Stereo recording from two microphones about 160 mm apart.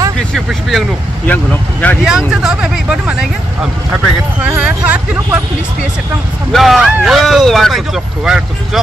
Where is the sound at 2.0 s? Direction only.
5° right (ahead or behind).